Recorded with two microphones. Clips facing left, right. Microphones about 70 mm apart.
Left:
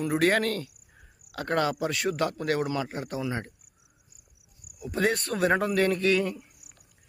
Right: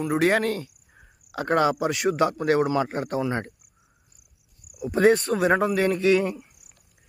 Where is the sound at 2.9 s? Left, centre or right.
Right.